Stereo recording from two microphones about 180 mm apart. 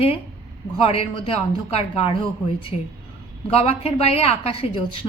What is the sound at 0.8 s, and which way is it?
A woman's voice, 30° left (ahead or behind).